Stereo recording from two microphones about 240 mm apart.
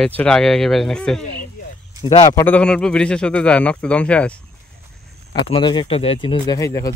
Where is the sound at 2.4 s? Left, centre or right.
Centre.